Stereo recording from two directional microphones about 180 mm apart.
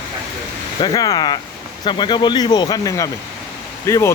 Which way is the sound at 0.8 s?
20° left (ahead or behind).